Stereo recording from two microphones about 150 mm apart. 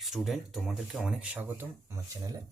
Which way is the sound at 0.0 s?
Centre (ahead or behind).